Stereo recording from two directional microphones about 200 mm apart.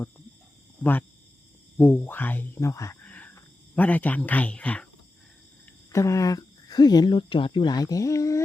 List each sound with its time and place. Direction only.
0.8 s speech: 10° left (ahead or behind)
5.9 s speech: 15° left (ahead or behind)